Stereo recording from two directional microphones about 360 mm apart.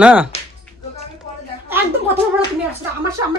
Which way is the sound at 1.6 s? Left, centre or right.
Centre.